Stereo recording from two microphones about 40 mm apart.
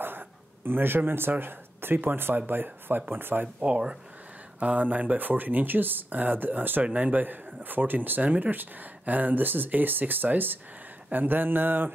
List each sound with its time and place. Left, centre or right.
0.7 s speech: right
4.6 s speech: right
6.8 s speech: right